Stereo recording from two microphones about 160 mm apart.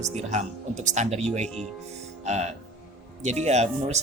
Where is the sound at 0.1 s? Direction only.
45° right (ahead or behind).